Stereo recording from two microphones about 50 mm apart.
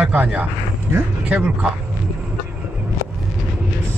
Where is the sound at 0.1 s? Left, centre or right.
Right.